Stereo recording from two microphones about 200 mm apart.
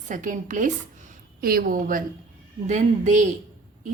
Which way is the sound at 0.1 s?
40° right (ahead or behind).